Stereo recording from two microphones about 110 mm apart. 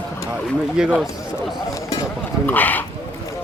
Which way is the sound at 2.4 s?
15° left (ahead or behind).